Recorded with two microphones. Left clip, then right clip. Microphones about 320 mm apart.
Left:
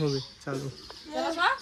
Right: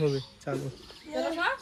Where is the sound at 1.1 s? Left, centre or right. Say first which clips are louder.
Left 3 dB; centre.